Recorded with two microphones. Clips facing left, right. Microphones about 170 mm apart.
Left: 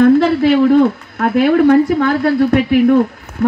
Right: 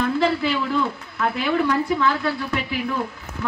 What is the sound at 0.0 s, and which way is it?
A woman's voice, 55° left (ahead or behind).